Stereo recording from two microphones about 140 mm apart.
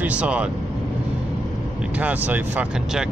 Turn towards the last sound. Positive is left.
turn(degrees=-10)  # may be behind; listen again after turning